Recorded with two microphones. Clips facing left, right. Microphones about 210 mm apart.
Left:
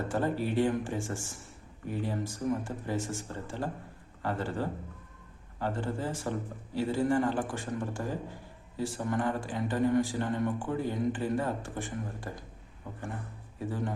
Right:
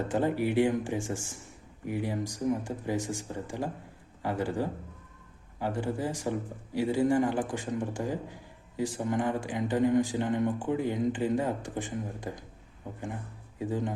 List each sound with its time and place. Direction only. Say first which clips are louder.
0.1 s speech: right 3 dB; 15° right (ahead or behind)